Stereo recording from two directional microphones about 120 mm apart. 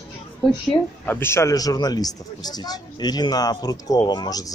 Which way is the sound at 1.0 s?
20° left (ahead or behind).